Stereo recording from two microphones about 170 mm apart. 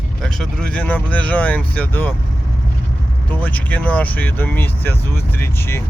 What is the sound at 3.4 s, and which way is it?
Speech, 10° left (ahead or behind).